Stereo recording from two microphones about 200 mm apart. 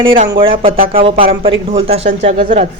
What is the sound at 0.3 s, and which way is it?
Speech, 25° right (ahead or behind).